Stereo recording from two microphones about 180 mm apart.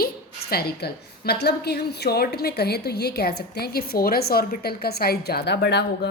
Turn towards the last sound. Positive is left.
turn(degrees=65)  # may be behind; listen again after turning